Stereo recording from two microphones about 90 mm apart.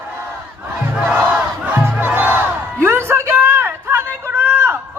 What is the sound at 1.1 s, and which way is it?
Crowd, 15° right (ahead or behind).